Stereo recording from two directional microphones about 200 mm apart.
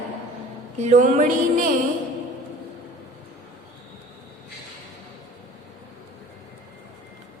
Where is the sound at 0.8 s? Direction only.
35° right (ahead or behind).